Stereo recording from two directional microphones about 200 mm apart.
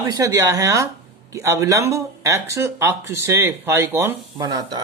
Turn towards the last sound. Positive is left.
turn(degrees=-20)  # may be behind; listen again after turning